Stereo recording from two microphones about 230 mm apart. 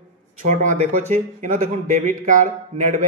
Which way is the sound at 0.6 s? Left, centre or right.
Right.